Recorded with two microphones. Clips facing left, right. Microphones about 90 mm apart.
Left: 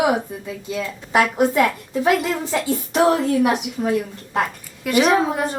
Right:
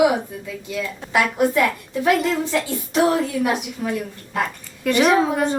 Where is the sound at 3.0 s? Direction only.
25° left (ahead or behind).